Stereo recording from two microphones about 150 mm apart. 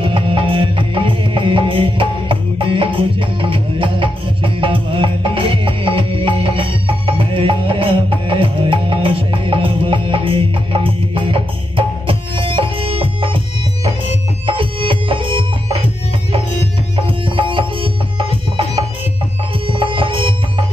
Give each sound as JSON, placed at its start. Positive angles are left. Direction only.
{"t": 0.0, "sound": "music", "side_deg": -35}
{"t": 14.4, "sound": "music", "side_deg": -35}
{"t": 16.9, "sound": "music", "side_deg": -35}
{"t": 19.7, "sound": "music", "side_deg": -35}